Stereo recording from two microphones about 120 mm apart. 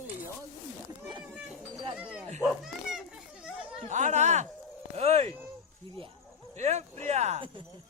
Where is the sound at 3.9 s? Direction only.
80° right.